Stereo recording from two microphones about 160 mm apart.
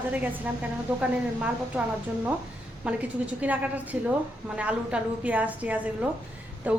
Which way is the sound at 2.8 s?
10° right (ahead or behind).